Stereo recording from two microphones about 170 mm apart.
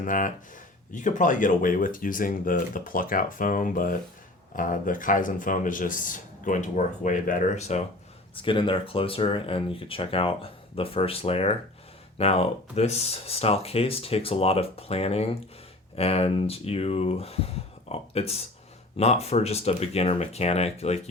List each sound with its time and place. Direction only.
0.0 s speech: 50° left (ahead or behind)
8.4 s speech: 30° left (ahead or behind)